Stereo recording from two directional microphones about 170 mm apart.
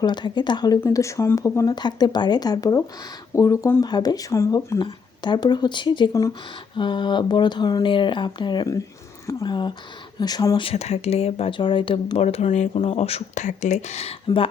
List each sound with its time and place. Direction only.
0.0 s speech: 25° left (ahead or behind)
10.7 s speech: 35° left (ahead or behind)